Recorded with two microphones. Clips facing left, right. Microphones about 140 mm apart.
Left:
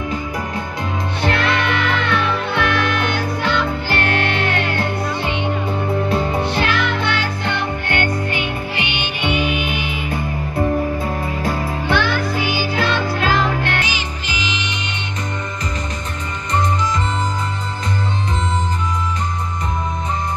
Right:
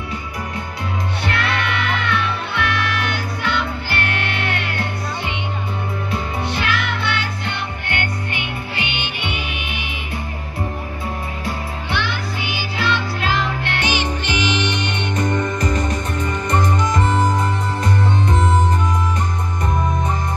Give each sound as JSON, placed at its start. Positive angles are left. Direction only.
{"t": 1.2, "sound": "music", "side_deg": 35}
{"t": 6.1, "sound": "music", "side_deg": 35}
{"t": 11.4, "sound": "music", "side_deg": 45}
{"t": 13.8, "sound": "music", "side_deg": -60}
{"t": 16.5, "sound": "music", "side_deg": -55}